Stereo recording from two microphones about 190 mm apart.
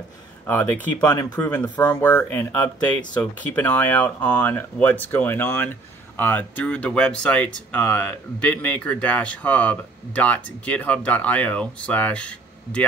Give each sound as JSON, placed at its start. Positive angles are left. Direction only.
{"t": 0.5, "sound": "speech", "side_deg": 10}